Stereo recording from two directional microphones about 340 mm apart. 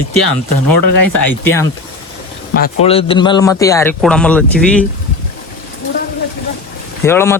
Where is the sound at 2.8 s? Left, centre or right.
Centre.